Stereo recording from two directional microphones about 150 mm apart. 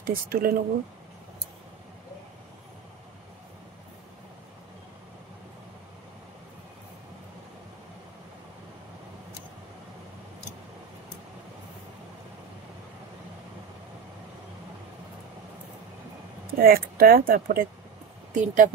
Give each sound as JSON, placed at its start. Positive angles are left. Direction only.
{"t": 0.0, "sound": "speech", "side_deg": -85}
{"t": 16.4, "sound": "speech", "side_deg": -80}
{"t": 18.3, "sound": "speech", "side_deg": -55}